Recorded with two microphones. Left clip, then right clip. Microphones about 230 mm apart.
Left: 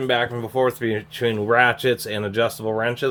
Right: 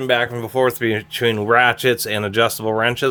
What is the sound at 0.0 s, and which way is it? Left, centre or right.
Speech, right.